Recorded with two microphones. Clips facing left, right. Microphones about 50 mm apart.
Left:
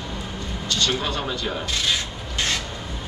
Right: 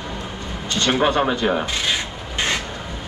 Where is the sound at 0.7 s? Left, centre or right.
Right.